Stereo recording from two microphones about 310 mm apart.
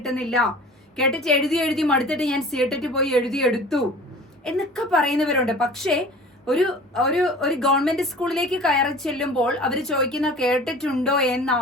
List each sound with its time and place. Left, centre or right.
0.0 s a woman's voice: centre